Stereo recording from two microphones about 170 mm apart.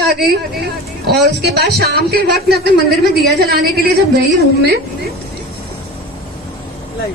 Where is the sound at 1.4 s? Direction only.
75° right (ahead or behind).